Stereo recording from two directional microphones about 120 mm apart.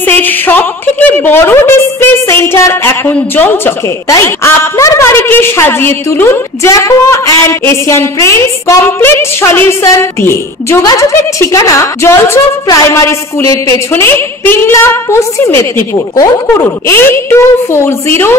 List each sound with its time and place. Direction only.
0.0 s a woman's voice: 15° left (ahead or behind)